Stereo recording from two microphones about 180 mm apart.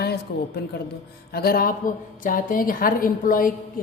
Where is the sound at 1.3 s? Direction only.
60° left (ahead or behind).